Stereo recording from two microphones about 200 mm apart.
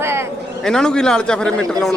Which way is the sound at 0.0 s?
10° right (ahead or behind).